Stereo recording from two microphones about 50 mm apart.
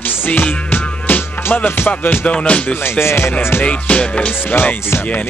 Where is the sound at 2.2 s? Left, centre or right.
Left.